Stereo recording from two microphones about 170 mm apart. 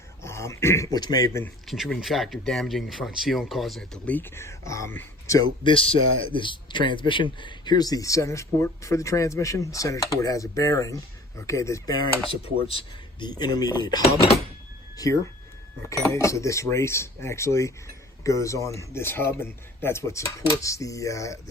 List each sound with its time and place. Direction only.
0.2 s throat clearing: 15° left (ahead or behind)
0.9 s speech: 25° left (ahead or behind)
1.6 s speech: centre (ahead or behind); by 5.5 s 20° left (ahead or behind)
5.6 s speech: 30° left (ahead or behind)
14.0 s speech: 35° left (ahead or behind)
14.9 s speech: 20° left (ahead or behind)